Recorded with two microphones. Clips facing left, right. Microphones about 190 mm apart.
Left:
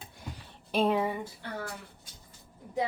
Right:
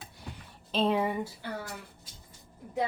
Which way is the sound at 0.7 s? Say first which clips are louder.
Left 1 dB; 10° left (ahead or behind).